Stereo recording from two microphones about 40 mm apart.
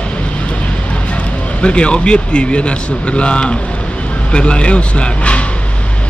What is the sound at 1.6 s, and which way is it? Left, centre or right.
Speech, left.